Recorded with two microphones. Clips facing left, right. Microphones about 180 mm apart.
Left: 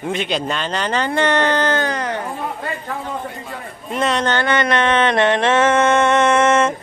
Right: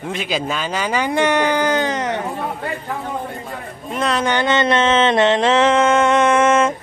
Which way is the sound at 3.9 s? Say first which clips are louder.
Left 1 dB; centre (ahead or behind).